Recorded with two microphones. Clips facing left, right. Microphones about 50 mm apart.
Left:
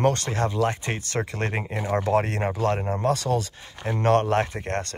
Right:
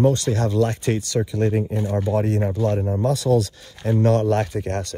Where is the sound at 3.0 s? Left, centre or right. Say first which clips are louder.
Right 7 dB; left.